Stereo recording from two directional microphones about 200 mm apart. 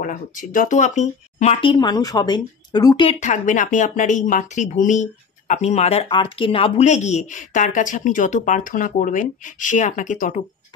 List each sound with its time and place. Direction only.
0.0 s speech: 40° left (ahead or behind); by 3.1 s 20° left (ahead or behind)
3.1 s speech: 35° left (ahead or behind)